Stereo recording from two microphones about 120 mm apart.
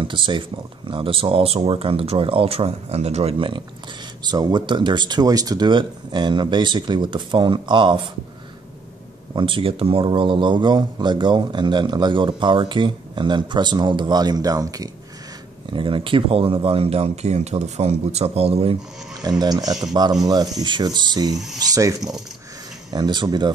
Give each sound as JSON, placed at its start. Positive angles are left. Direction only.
{"t": 0.0, "sound": "speech", "side_deg": -40}
{"t": 9.3, "sound": "speech", "side_deg": -45}
{"t": 15.7, "sound": "speech", "side_deg": -45}
{"t": 19.2, "sound": "speech", "side_deg": -35}